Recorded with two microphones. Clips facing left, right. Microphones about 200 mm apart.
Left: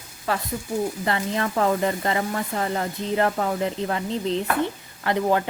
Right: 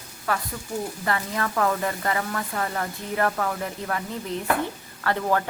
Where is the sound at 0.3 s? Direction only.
25° left (ahead or behind).